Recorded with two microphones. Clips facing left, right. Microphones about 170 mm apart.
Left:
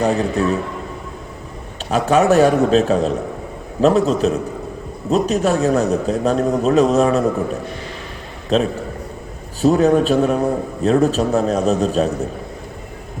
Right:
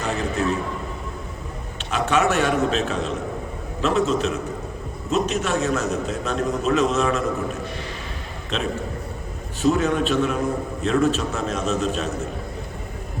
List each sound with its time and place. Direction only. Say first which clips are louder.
0.0 s a man's voice: left 7 dB; 35° left (ahead or behind)
1.9 s a man's voice: left 7 dB; 35° left (ahead or behind)
8.5 s a man's voice: left 8 dB; 35° left (ahead or behind)